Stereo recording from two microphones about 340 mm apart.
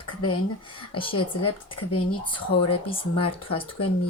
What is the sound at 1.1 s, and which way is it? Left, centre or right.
Speech, left.